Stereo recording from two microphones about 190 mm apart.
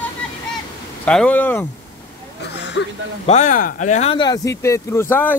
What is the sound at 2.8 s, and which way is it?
Speech, 80° left.